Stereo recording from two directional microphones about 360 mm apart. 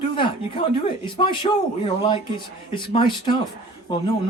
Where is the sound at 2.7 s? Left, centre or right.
Centre.